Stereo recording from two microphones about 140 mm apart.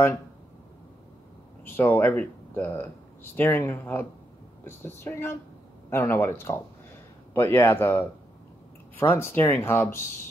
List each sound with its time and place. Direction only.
1.6 s speech: 15° left (ahead or behind)